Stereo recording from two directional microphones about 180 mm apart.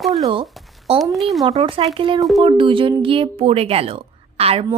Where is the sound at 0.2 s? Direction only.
30° right (ahead or behind).